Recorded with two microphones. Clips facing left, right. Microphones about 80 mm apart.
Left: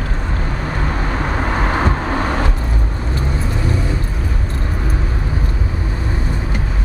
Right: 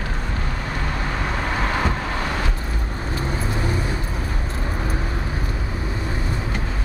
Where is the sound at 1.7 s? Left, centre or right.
Left.